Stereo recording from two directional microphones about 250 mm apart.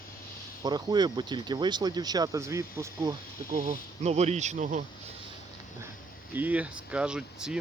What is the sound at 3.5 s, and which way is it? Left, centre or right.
Speech, right.